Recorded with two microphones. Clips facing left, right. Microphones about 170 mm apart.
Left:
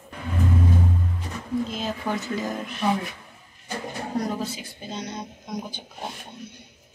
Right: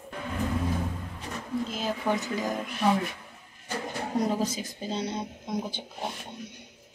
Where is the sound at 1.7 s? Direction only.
10° right (ahead or behind).